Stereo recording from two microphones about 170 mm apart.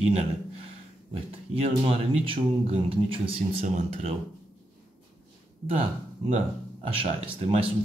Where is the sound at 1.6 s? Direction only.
35° right (ahead or behind).